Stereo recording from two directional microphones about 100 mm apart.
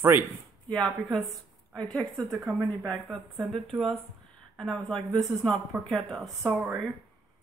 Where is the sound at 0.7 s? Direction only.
5° left (ahead or behind).